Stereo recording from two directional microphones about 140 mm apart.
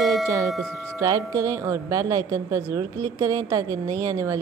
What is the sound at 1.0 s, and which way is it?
A woman's voice, 25° right (ahead or behind).